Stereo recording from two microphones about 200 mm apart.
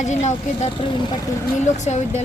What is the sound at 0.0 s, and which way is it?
Speech, 35° left (ahead or behind).